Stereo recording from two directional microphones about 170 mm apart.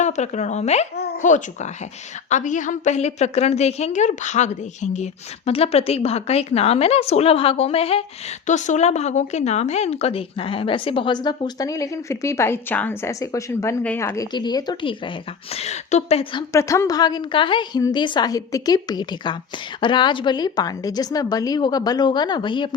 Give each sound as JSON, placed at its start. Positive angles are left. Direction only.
{"t": 0.0, "sound": "a woman's voice", "side_deg": 45}
{"t": 15.5, "sound": "a woman's voice", "side_deg": 40}
{"t": 16.5, "sound": "speech", "side_deg": 20}